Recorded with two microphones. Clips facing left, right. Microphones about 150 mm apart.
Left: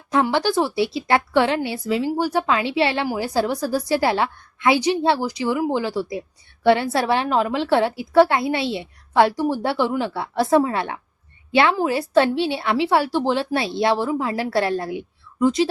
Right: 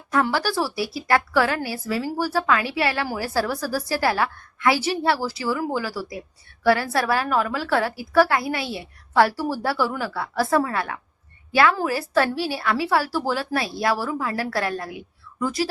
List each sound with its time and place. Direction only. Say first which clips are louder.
0.1 s a woman's voice: left 3 dB; 20° left (ahead or behind)